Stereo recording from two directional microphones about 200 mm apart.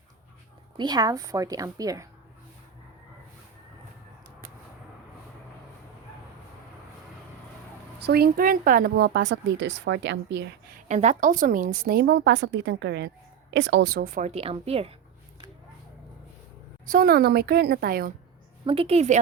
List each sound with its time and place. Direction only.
0.8 s a woman's voice: 20° right (ahead or behind)
8.0 s speech: 55° right (ahead or behind)
10.8 s a woman's voice: 35° right (ahead or behind)
16.8 s a woman's voice: 45° right (ahead or behind)
18.6 s a woman's voice: 30° right (ahead or behind)